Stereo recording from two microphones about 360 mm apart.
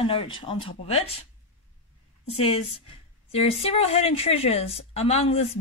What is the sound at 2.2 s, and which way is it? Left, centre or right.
A woman's voice, centre.